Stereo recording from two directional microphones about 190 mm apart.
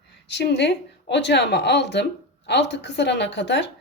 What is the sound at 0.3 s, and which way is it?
A woman's voice, 65° left (ahead or behind).